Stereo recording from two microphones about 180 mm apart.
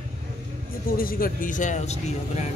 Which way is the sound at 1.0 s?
55° left (ahead or behind).